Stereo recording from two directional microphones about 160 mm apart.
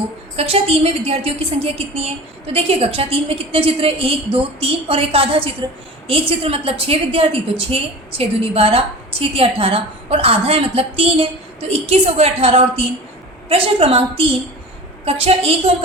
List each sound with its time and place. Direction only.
0.3 s a woman's voice: 40° right (ahead or behind)